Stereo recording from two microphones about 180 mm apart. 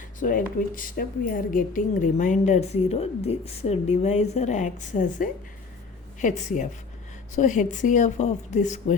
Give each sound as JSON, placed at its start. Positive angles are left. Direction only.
{"t": 0.2, "sound": "a woman's voice", "side_deg": 50}